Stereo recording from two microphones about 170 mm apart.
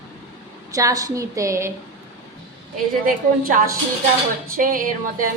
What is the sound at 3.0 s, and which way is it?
Speech, 50° right (ahead or behind).